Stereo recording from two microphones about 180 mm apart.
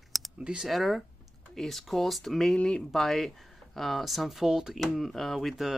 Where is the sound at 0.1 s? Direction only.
5° right (ahead or behind).